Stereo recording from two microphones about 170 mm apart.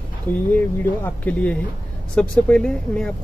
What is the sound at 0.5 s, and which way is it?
Speech, 10° left (ahead or behind).